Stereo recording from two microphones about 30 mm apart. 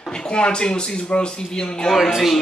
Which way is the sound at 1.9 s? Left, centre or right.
Centre.